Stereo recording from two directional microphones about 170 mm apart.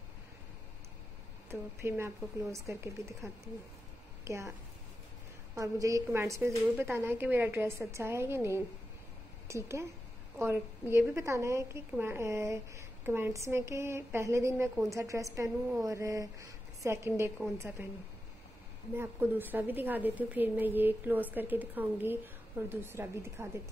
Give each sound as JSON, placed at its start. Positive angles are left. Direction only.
{"t": 1.5, "sound": "a woman's voice", "side_deg": -15}
{"t": 4.2, "sound": "a woman's voice", "side_deg": -15}
{"t": 18.9, "sound": "a woman's voice", "side_deg": -10}